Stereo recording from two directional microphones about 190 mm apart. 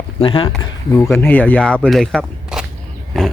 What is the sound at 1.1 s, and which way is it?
Speech, 10° left (ahead or behind).